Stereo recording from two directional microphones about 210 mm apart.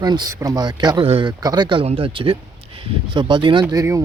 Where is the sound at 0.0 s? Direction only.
20° right (ahead or behind).